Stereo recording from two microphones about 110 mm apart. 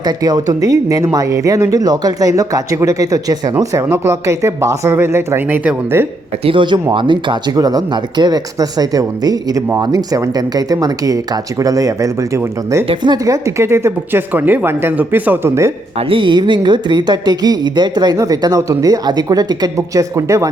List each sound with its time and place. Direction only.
0.0 s speech: 35° right (ahead or behind); by 6.1 s 20° right (ahead or behind)
6.4 s speech: 50° right (ahead or behind); by 12.8 s 25° right (ahead or behind)
12.9 s speech: 45° right (ahead or behind); by 15.7 s 25° right (ahead or behind)
16.0 s speech: 55° right (ahead or behind); by 20.5 s 30° right (ahead or behind)